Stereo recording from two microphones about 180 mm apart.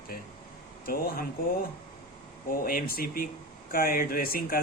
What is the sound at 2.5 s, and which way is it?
Speech, 50° left (ahead or behind).